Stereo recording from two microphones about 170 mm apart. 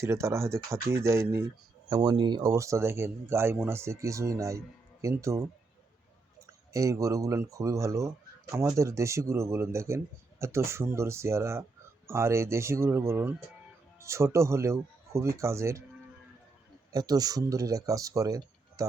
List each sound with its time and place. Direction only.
0.0 s speech: 15° right (ahead or behind)
6.7 s speech: 20° right (ahead or behind)
16.9 s speech: 20° right (ahead or behind)